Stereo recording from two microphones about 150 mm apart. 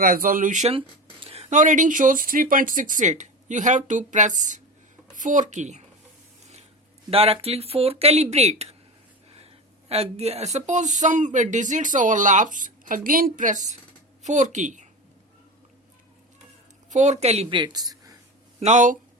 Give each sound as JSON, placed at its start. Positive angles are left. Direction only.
{"t": 0.0, "sound": "speech", "side_deg": -70}
{"t": 1.2, "sound": "speech", "side_deg": -45}
{"t": 7.1, "sound": "speech", "side_deg": -40}
{"t": 9.9, "sound": "speech", "side_deg": -45}
{"t": 16.9, "sound": "speech", "side_deg": -50}
{"t": 18.6, "sound": "speech", "side_deg": -50}